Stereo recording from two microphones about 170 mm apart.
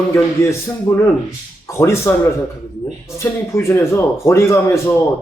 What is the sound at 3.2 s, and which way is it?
A man's voice, 15° left (ahead or behind).